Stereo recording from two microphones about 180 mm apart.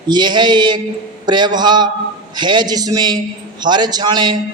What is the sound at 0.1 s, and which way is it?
A man's voice, 25° right (ahead or behind).